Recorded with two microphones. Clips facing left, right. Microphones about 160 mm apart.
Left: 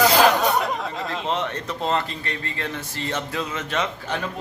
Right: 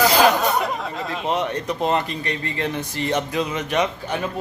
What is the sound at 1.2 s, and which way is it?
Speech, 15° right (ahead or behind).